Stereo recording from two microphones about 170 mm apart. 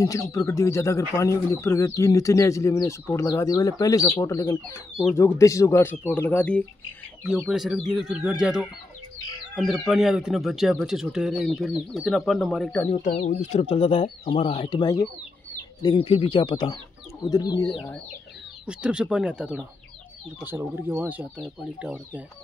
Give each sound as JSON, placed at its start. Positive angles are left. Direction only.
{"t": 0.0, "sound": "speech", "side_deg": 20}
{"t": 9.8, "sound": "speech", "side_deg": 0}
{"t": 12.9, "sound": "speech", "side_deg": 40}
{"t": 18.7, "sound": "speech", "side_deg": -5}